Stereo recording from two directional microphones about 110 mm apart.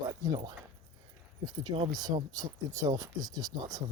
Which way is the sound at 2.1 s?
35° right (ahead or behind).